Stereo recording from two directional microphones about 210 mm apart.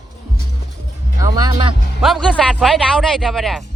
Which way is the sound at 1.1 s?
20° right (ahead or behind).